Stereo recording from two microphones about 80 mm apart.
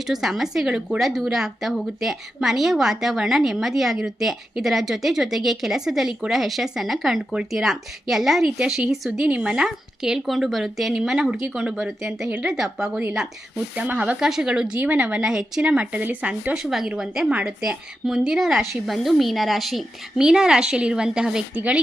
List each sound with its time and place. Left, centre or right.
0.1 s a woman's voice: centre
13.7 s a woman's voice: centre